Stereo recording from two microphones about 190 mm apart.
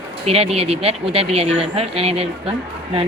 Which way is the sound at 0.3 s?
30° right (ahead or behind).